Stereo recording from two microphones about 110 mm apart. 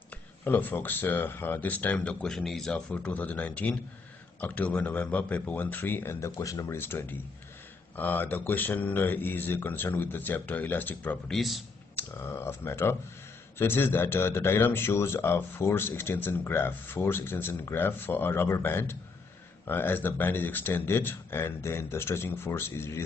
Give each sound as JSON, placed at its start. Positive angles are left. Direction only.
{"t": 0.4, "sound": "speech", "side_deg": 15}
{"t": 11.2, "sound": "a man's voice", "side_deg": 0}
{"t": 11.9, "sound": "speech", "side_deg": 20}